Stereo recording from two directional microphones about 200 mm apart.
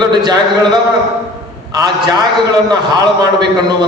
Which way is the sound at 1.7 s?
20° right (ahead or behind).